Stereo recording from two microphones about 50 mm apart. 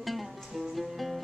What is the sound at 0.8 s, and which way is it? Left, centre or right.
Music, centre.